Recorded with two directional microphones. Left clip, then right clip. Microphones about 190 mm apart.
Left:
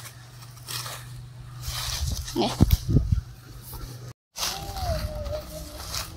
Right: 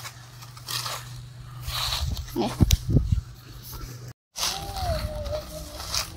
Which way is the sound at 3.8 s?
10° right (ahead or behind).